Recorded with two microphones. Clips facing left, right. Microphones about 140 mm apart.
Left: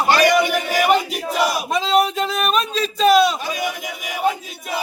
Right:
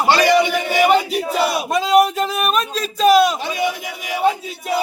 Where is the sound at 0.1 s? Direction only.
30° right (ahead or behind).